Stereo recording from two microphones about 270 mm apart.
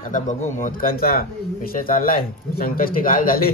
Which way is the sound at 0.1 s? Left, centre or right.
Left.